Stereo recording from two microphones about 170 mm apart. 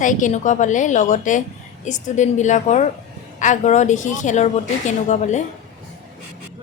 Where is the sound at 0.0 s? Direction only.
50° left (ahead or behind).